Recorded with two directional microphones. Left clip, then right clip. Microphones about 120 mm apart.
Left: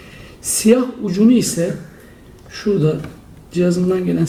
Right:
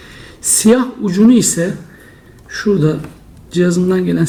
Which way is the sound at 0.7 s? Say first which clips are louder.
Left 1 dB; 30° right (ahead or behind).